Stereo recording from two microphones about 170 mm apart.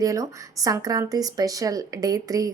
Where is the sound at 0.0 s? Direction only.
20° right (ahead or behind).